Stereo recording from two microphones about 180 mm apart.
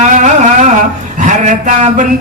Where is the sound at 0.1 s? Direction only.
45° right (ahead or behind).